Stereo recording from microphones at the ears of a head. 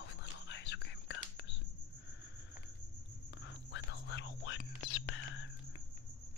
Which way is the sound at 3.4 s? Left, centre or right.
Left.